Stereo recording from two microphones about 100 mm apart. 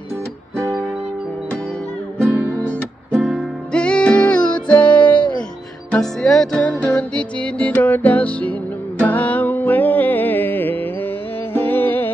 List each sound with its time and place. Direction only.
0.6 s music: 15° right (ahead or behind)
2.2 s music: 15° left (ahead or behind)
3.2 s music: 10° right (ahead or behind)
3.7 s music: 10° left (ahead or behind)